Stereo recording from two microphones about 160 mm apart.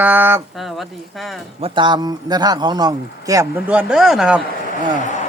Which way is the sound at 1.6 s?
35° right (ahead or behind).